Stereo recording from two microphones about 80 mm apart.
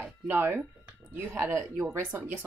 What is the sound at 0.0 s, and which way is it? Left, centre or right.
Speech, right.